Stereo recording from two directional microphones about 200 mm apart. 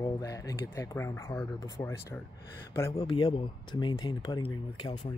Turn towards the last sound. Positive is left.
turn(degrees=20)  # may be behind; listen again after turning